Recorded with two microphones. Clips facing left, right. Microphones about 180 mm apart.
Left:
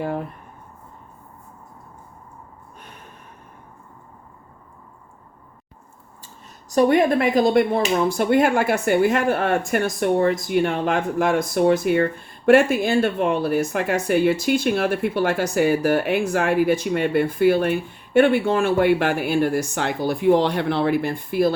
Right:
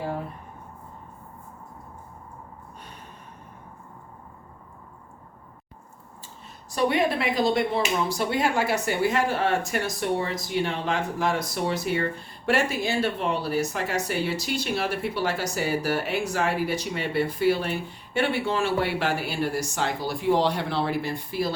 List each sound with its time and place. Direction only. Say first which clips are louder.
6.7 s speech: left 7 dB; 45° left (ahead or behind)